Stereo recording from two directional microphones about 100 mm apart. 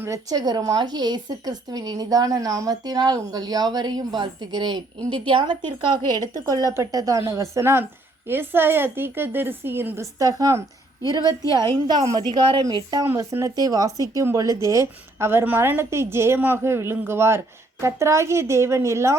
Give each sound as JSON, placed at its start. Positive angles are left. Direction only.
{"t": 0.0, "sound": "a woman's voice", "side_deg": -35}
{"t": 10.2, "sound": "a woman's voice", "side_deg": -35}
{"t": 12.6, "sound": "a woman's voice", "side_deg": -40}
{"t": 13.1, "sound": "a woman's voice", "side_deg": -25}